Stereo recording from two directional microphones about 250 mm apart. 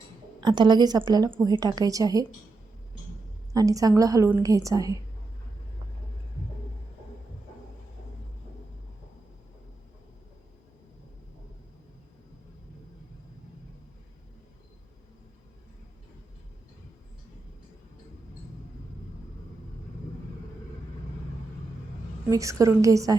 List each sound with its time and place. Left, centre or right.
0.3 s a woman's voice: centre
3.5 s a woman's voice: centre
22.3 s a woman's voice: centre